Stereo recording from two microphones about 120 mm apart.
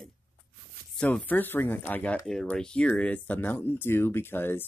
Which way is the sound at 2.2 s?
5° left (ahead or behind).